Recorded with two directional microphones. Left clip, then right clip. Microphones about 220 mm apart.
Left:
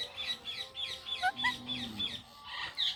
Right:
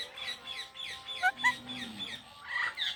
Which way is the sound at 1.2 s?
15° right (ahead or behind).